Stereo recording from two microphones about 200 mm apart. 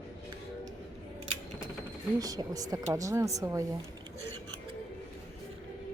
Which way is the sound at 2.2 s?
20° right (ahead or behind).